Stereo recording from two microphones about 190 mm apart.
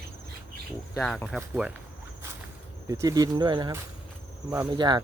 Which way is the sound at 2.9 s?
15° right (ahead or behind).